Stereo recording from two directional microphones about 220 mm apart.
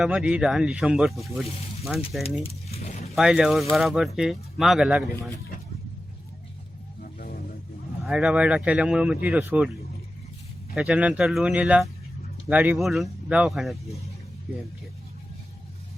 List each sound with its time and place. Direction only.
0.0 s speech: 5° right (ahead or behind)
2.4 s keys jangling: 30° left (ahead or behind)
3.2 s speech: centre (ahead or behind)
7.0 s vehicle: 40° left (ahead or behind)
8.0 s speech: 5° right (ahead or behind)
10.8 s speech: 5° right (ahead or behind)